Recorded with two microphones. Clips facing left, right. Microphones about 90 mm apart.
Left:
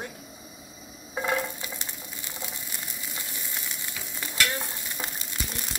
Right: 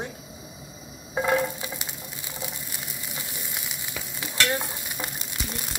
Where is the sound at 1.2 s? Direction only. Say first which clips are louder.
Right 4 dB; 15° right (ahead or behind).